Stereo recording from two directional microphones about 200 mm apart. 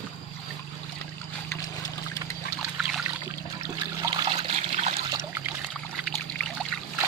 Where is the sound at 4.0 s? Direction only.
20° right (ahead or behind).